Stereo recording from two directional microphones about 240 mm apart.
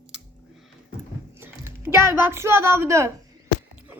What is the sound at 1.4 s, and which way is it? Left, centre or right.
A woman's voice, centre.